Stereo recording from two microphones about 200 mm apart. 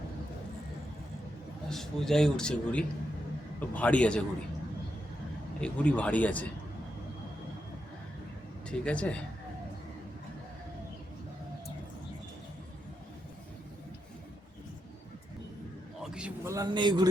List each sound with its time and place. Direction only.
1.7 s a man's voice: centre (ahead or behind)
5.5 s speech: 5° left (ahead or behind)
8.8 s speech: 5° left (ahead or behind)
16.0 s a sound: 5° right (ahead or behind); by 17.1 s 25° right (ahead or behind)